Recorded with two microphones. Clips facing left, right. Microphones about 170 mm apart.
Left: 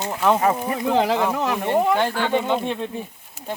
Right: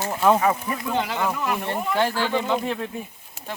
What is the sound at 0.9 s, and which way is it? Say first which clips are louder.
Speech: left 6 dB; 90° left.